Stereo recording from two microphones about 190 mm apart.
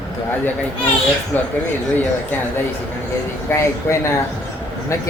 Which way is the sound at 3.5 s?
15° left (ahead or behind).